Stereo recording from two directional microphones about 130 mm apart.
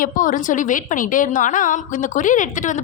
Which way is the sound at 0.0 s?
90° left.